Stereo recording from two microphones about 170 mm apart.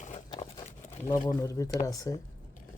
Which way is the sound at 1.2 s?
20° left (ahead or behind).